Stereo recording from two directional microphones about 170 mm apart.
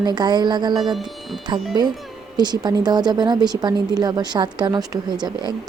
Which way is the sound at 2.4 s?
25° right (ahead or behind).